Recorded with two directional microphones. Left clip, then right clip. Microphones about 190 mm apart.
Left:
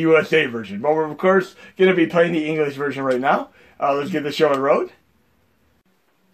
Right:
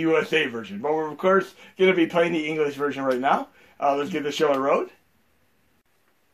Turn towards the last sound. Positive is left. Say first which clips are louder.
# left 4 dB
turn(degrees=40)  # may be behind; listen again after turning